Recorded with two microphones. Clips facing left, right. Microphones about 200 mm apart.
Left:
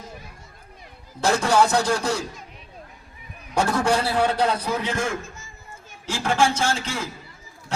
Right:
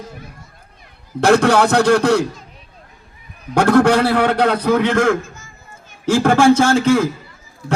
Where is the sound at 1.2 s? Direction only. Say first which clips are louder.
Right 7 dB; 70° right (ahead or behind).